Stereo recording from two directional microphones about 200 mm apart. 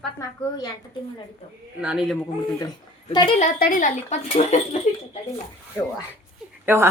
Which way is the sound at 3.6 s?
45° left (ahead or behind).